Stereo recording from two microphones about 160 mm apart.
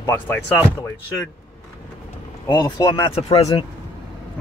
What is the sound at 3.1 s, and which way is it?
Speech, 40° left (ahead or behind).